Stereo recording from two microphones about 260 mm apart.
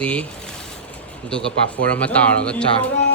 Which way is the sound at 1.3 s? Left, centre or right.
Centre.